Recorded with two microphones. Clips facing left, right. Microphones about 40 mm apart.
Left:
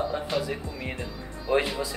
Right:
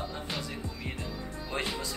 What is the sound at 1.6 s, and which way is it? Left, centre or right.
Speech, centre.